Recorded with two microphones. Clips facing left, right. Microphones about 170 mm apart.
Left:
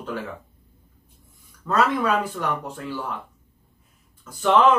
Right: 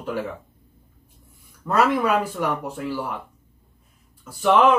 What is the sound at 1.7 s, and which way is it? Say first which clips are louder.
Speech: right 2 dB; 10° right (ahead or behind).